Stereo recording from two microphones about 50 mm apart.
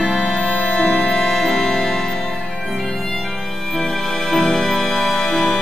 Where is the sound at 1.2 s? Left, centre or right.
Centre.